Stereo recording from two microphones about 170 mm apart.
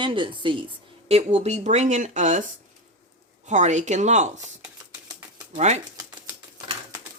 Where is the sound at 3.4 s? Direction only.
45° right (ahead or behind).